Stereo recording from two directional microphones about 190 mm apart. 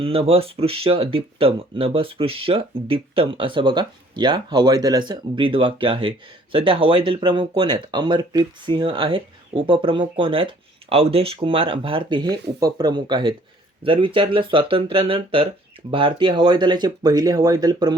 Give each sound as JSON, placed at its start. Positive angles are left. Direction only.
{"t": 0.0, "sound": "speech", "side_deg": -30}